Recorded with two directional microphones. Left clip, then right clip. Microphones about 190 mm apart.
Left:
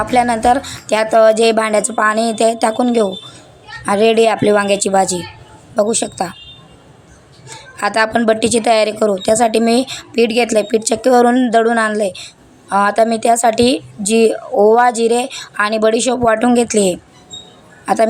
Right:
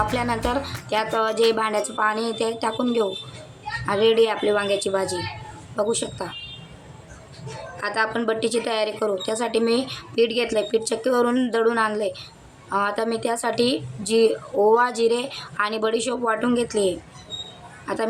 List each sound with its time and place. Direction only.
0.1 s a woman's voice: 35° left (ahead or behind)
7.8 s a woman's voice: 40° left (ahead or behind)